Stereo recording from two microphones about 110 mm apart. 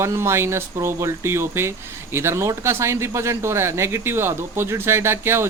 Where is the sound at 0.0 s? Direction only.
25° right (ahead or behind).